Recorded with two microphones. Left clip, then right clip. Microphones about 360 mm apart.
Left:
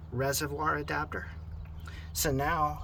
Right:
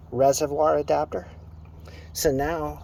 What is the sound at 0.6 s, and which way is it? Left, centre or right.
Speech, centre.